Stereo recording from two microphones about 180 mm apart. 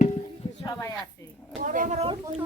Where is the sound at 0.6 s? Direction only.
20° left (ahead or behind).